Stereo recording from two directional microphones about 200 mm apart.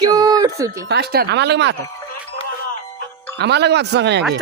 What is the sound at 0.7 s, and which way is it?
Speech, 55° right (ahead or behind).